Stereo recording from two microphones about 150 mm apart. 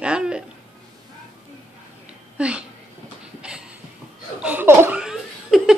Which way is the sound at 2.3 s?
5° right (ahead or behind).